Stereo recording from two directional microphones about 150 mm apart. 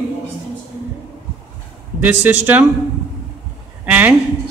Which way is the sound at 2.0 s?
10° right (ahead or behind).